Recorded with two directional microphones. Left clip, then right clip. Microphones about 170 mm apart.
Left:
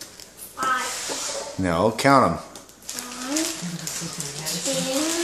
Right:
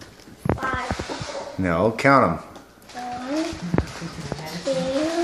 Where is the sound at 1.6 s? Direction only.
15° left (ahead or behind).